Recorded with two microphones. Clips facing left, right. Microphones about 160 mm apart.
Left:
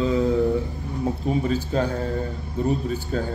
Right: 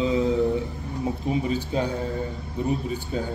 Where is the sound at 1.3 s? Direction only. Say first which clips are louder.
Left 2 dB; 10° right (ahead or behind).